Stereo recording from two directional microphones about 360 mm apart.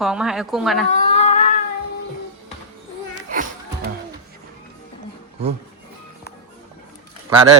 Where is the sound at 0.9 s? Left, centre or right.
Centre.